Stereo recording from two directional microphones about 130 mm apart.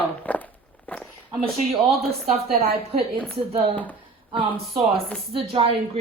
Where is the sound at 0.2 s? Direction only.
10° left (ahead or behind).